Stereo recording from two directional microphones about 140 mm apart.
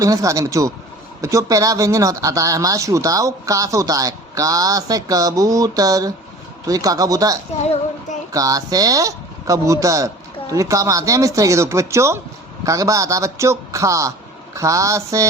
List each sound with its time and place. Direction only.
0.0 s speech: 25° right (ahead or behind)